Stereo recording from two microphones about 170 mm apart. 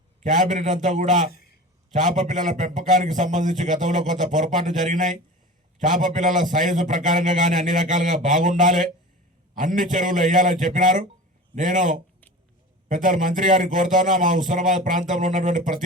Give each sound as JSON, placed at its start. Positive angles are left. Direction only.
{"t": 0.2, "sound": "a man's voice", "side_deg": -45}
{"t": 1.3, "sound": "a sound", "side_deg": 65}
{"t": 1.9, "sound": "a man's voice", "side_deg": -45}